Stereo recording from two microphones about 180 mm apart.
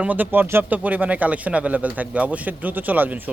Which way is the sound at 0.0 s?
10° right (ahead or behind).